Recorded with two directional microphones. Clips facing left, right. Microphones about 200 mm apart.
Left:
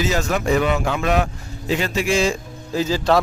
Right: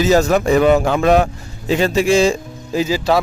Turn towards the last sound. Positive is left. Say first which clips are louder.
# right 2 dB
turn(degrees=-5)  # may be behind; listen again after turning